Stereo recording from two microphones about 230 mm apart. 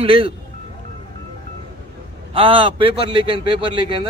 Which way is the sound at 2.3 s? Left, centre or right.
Right.